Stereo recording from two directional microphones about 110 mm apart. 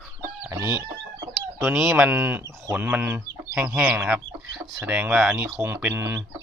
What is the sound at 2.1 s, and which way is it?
Speech, 20° right (ahead or behind).